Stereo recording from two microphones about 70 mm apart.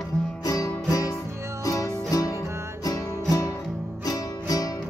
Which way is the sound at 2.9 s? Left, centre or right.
Left.